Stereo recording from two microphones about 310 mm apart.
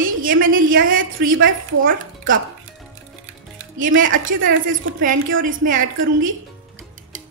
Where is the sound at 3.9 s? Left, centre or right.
Right.